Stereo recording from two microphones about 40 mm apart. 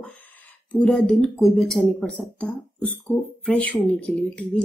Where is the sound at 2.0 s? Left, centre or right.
Left.